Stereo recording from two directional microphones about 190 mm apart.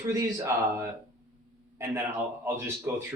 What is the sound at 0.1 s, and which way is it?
Speech, 15° right (ahead or behind).